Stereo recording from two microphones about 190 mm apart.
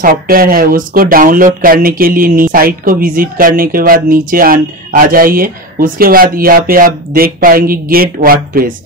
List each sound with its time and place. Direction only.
0.0 s speech: 50° right (ahead or behind)